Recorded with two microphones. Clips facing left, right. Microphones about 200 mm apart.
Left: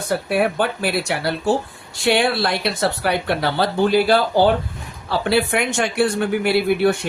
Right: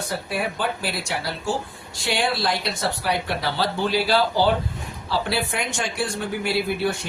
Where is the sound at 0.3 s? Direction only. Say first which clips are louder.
Left 7 dB; 60° left (ahead or behind).